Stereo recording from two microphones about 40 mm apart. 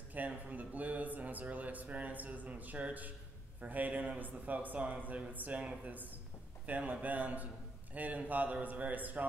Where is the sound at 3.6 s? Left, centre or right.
Right.